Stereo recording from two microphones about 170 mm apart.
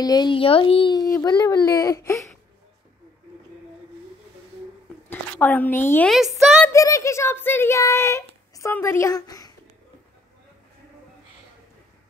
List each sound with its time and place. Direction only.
0.0 s a child's voice: 25° left (ahead or behind)
5.1 s speech: 10° left (ahead or behind)
6.1 s a woman's voice: centre (ahead or behind)
6.7 s speech: 20° left (ahead or behind)